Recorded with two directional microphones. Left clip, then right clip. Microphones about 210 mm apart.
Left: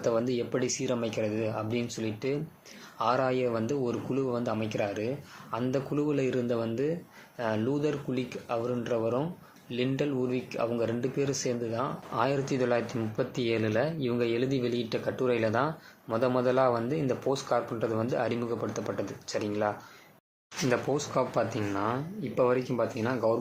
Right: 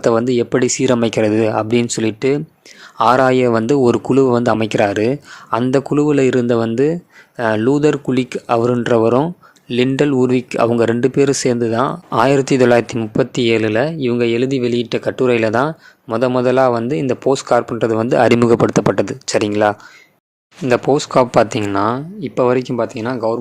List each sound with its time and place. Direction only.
0.0 s speech: 50° right (ahead or behind)